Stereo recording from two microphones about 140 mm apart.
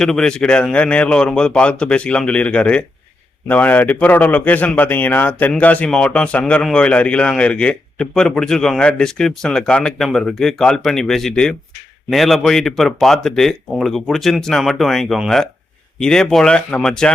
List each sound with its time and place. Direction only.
0.0 s a man's voice: 5° left (ahead or behind)